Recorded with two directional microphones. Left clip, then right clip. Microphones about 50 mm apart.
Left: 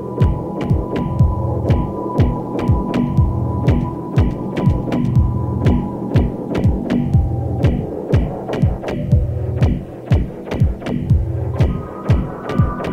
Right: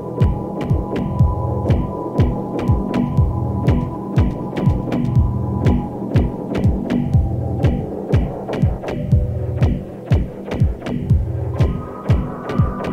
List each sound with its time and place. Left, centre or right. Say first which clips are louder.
0.2 s hum: left 1 dB; left
7.6 s throbbing: left 2 dB; left